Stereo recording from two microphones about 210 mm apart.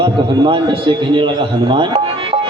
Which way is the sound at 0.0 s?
25° right (ahead or behind).